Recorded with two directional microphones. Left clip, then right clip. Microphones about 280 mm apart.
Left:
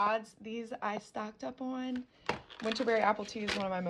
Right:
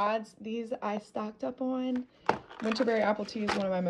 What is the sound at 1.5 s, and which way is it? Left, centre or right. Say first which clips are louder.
Speech: right 6 dB; left.